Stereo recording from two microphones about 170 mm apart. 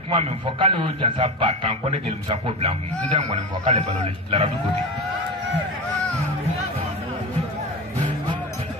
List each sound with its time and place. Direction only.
0.1 s a man's voice: 35° right (ahead or behind)